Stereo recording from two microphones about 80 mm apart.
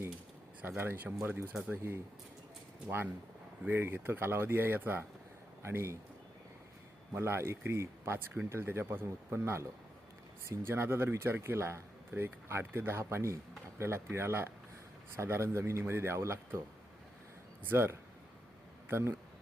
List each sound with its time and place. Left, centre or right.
0.8 s speech: right
7.1 s speech: right
17.7 s a man's voice: right